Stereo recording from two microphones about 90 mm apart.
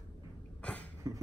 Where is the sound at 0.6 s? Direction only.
10° left (ahead or behind).